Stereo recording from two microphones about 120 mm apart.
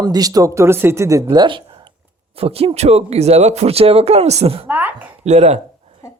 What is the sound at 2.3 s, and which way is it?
Speech, 55° right (ahead or behind).